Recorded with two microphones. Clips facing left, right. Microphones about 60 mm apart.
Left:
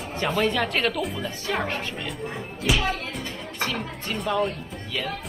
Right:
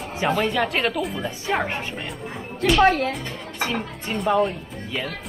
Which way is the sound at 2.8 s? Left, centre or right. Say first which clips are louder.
Right 10 dB; right.